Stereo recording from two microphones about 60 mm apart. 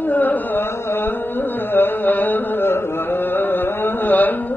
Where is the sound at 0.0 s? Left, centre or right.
Left.